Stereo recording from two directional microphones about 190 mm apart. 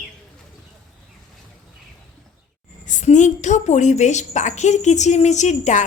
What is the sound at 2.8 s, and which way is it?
A woman's voice, 40° left (ahead or behind).